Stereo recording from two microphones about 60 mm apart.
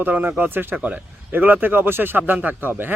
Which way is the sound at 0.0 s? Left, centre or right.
Right.